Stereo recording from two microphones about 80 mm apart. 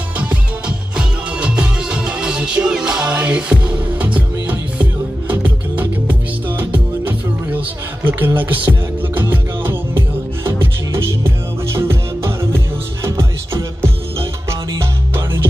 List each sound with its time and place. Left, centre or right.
0.2 s music: centre; by 15.4 s right